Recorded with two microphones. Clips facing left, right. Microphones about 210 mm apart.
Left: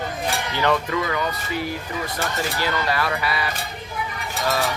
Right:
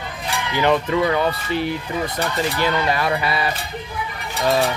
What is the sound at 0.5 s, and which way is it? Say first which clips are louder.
Speech: right 5 dB; 20° right (ahead or behind).